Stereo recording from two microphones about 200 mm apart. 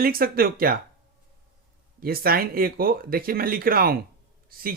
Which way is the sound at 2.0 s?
50° right (ahead or behind).